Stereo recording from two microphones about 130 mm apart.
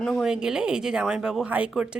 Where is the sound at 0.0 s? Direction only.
Centre (ahead or behind).